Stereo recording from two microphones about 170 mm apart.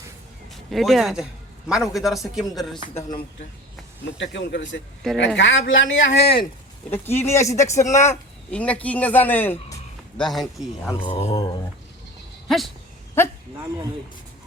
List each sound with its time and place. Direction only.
0.5 s a man's voice: centre (ahead or behind)
4.2 s speech: 90° left
5.0 s speech: 5° left (ahead or behind)
5.4 s speech: 90° left; by 6.3 s 75° left (ahead or behind)
6.9 s speech: 15° left (ahead or behind)
10.2 s speech: centre (ahead or behind)
11.0 s speech: 35° left (ahead or behind)
12.5 s speech: centre (ahead or behind)